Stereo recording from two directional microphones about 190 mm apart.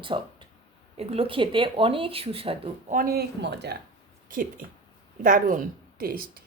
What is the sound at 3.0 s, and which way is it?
Speech, 55° right (ahead or behind).